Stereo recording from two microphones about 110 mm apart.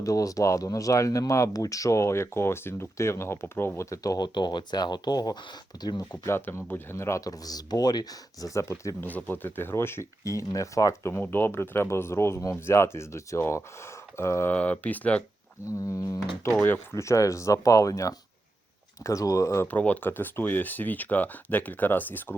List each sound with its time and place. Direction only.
0.0 s speech: 30° left (ahead or behind)
6.3 s speech: 20° left (ahead or behind)
11.1 s speech: 20° left (ahead or behind)
14.5 s speech: 15° left (ahead or behind)
15.6 s speech: 30° left (ahead or behind)
16.5 s speech: 15° left (ahead or behind); by 19.6 s 30° left (ahead or behind)
19.6 s speech: 15° left (ahead or behind)